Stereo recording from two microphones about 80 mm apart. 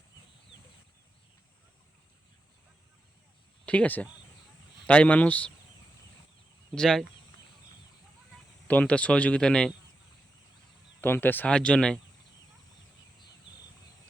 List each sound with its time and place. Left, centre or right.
3.7 s speech: centre
6.7 s speech: centre
8.6 s speech: centre
11.0 s speech: left